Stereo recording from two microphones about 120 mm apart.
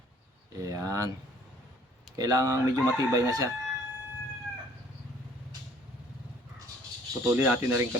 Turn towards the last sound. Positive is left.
turn(degrees=-20)  # may be behind; listen again after turning